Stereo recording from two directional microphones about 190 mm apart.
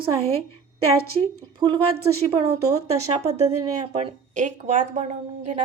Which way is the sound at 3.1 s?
35° right (ahead or behind).